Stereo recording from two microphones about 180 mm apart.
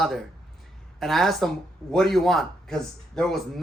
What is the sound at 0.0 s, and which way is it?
Speech, centre (ahead or behind).